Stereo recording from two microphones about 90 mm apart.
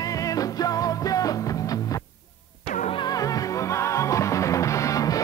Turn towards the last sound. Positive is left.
turn(degrees=40)  # may be behind; listen again after turning